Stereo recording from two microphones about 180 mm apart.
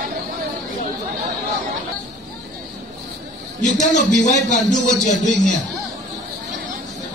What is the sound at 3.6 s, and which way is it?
Music, 40° left (ahead or behind).